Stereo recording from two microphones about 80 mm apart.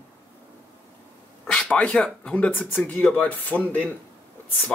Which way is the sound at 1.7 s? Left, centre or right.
Centre.